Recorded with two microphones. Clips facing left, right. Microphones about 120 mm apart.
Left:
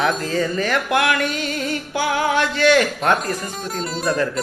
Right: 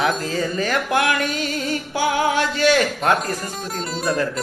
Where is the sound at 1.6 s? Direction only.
30° right (ahead or behind).